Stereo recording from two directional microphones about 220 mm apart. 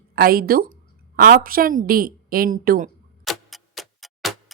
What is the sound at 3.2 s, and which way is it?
Clock, centre (ahead or behind).